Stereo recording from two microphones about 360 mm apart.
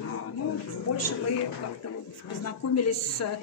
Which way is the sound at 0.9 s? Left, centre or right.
Left.